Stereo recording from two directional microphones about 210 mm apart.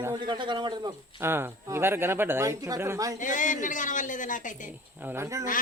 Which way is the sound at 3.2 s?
35° left (ahead or behind).